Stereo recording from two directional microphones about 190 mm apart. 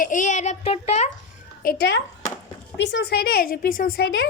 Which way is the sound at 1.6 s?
55° left (ahead or behind).